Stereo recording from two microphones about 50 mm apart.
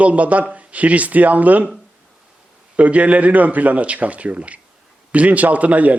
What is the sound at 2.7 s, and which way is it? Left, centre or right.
A man's voice, right.